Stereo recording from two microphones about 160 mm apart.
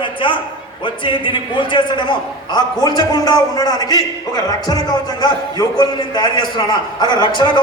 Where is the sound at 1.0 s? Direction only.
30° left (ahead or behind).